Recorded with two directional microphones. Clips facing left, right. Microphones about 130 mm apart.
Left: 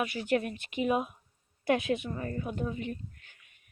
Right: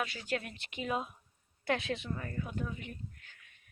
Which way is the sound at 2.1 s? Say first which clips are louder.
Left 4 dB; 30° left (ahead or behind).